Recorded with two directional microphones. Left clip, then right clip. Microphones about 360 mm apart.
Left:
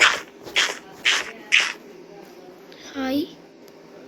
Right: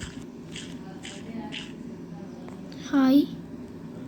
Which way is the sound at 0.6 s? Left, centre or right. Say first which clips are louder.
Left 19 dB; left.